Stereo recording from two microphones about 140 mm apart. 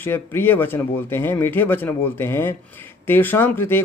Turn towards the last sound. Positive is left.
turn(degrees=15)  # may be behind; listen again after turning